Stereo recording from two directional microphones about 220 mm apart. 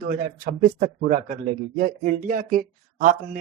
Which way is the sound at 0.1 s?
40° right (ahead or behind).